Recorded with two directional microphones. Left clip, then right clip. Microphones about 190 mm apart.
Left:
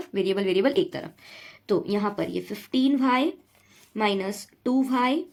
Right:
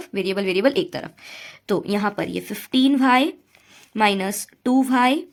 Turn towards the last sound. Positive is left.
turn(degrees=-45)  # may be behind; listen again after turning